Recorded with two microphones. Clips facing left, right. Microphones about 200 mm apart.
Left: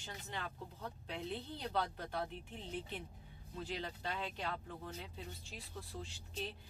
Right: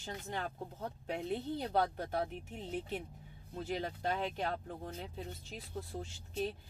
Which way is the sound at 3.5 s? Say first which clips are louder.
Right 5 dB; 45° right (ahead or behind).